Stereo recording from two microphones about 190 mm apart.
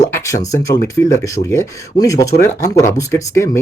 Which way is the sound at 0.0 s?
15° left (ahead or behind).